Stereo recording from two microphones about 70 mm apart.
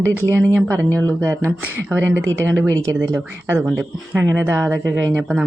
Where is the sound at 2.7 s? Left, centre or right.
Right.